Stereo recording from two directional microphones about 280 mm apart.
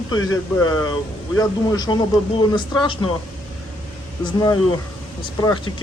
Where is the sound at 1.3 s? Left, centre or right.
Centre.